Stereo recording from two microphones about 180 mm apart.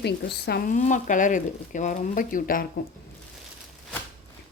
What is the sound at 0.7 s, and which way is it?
Speech, 45° left (ahead or behind).